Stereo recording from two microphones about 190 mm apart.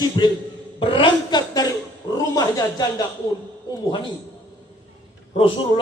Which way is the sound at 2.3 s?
20° left (ahead or behind).